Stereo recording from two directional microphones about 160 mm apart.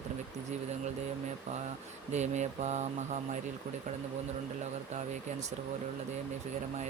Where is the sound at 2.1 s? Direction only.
45° right (ahead or behind).